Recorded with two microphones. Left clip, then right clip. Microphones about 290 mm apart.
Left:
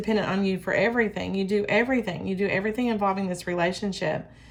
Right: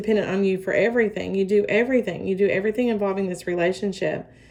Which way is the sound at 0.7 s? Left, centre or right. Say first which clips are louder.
Right 2 dB; left.